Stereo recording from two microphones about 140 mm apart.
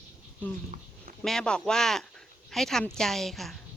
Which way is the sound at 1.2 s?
5° left (ahead or behind).